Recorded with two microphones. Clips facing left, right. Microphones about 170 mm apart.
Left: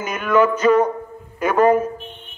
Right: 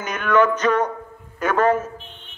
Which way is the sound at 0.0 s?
10° left (ahead or behind).